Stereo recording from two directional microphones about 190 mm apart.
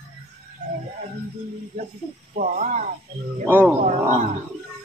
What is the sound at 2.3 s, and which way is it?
Speech, 45° right (ahead or behind).